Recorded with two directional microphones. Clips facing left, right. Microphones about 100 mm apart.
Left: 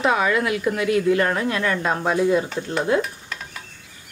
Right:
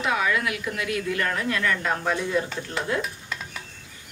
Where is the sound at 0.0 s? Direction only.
35° left (ahead or behind); by 3.0 s 15° left (ahead or behind).